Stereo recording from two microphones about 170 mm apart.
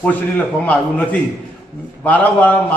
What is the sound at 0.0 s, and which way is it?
A man's voice, 10° left (ahead or behind).